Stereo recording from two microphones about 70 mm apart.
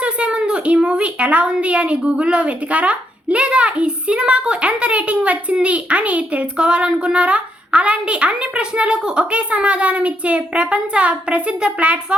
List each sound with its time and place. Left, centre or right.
0.0 s a woman's voice: centre